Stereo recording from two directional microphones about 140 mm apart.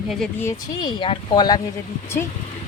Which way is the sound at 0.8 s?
35° left (ahead or behind).